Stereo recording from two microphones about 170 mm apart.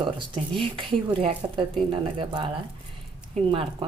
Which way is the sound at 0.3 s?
30° right (ahead or behind).